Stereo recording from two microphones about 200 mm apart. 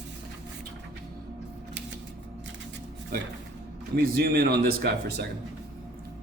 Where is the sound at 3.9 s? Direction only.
50° right (ahead or behind).